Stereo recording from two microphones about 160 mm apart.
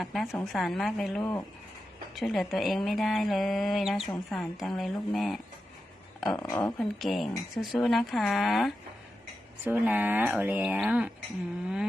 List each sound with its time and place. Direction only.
0.0 s speech: centre (ahead or behind)
1.2 s speech: 20° left (ahead or behind)
2.1 s speech: centre (ahead or behind)
6.2 s speech: 20° left (ahead or behind)
6.7 s speech: centre (ahead or behind)